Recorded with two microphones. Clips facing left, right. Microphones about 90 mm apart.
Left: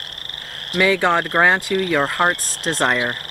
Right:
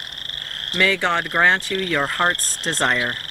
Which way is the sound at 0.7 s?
10° left (ahead or behind).